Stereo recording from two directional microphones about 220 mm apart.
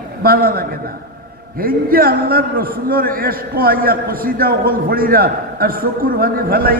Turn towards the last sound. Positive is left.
turn(degrees=-45)  # may be behind; listen again after turning